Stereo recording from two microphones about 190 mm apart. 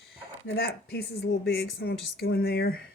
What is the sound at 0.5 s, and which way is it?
Speech, 60° left (ahead or behind).